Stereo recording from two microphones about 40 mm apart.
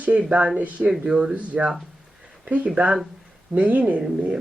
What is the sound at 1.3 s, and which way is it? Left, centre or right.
A woman's voice, right.